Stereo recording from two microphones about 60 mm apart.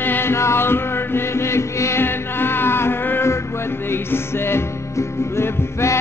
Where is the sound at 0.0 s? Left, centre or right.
Left.